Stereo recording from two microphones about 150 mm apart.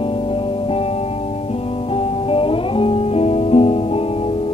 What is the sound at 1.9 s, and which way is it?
Music, 40° left (ahead or behind).